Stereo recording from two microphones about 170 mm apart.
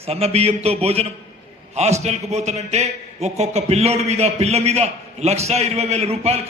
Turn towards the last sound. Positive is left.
turn(degrees=-35)  # may be behind; listen again after turning